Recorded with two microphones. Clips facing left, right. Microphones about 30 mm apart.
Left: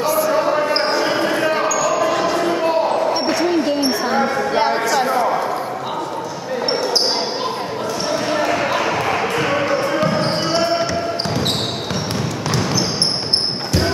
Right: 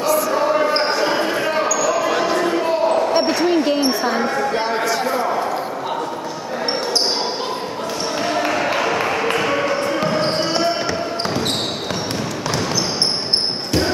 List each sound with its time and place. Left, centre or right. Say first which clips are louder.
0.0 s basketball bounce: left 1 dB; centre
3.2 s basketball bounce: right 1 dB; centre
4.0 s a sound: left 1 dB; centre
4.5 s a sound: left 3 dB; centre
5.0 s basketball bounce: left 2 dB; centre
8.4 s basketball bounce: right 1 dB; centre
12.4 s basketball bounce: left 1 dB; centre